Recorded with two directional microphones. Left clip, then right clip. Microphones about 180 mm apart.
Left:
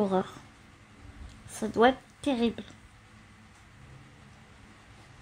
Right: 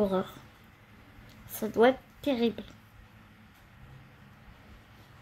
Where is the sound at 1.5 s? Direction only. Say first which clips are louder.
Even; 30° left (ahead or behind).